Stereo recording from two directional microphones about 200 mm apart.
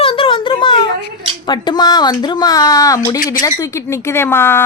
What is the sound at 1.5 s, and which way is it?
Speech, 20° left (ahead or behind).